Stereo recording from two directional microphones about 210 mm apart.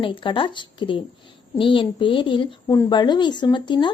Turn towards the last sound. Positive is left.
turn(degrees=20)  # may be behind; listen again after turning